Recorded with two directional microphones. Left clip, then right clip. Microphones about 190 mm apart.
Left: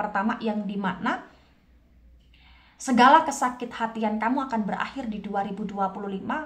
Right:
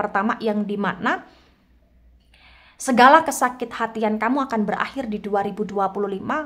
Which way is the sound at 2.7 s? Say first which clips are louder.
Right 4 dB; 40° right (ahead or behind).